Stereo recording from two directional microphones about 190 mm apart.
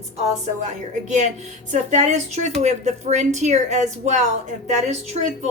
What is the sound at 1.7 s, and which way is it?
A woman's voice, 40° right (ahead or behind).